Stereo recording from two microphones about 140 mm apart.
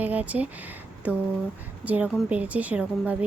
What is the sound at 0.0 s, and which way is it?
Speech, 10° right (ahead or behind).